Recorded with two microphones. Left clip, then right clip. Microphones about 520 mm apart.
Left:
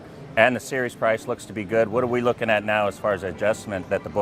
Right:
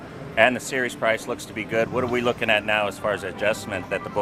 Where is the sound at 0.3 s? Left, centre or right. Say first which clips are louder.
Even; left.